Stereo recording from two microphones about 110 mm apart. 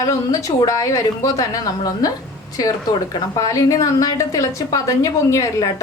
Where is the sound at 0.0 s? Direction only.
30° left (ahead or behind).